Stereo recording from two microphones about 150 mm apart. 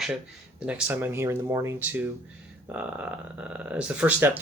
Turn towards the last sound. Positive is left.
turn(degrees=-10)  # may be behind; listen again after turning